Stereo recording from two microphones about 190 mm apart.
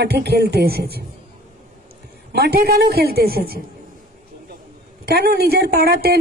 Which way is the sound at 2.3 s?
55° right (ahead or behind).